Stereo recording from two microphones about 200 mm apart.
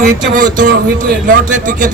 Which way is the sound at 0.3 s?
45° right (ahead or behind).